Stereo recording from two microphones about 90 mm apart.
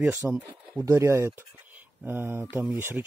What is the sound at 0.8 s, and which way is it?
Speech, 35° right (ahead or behind).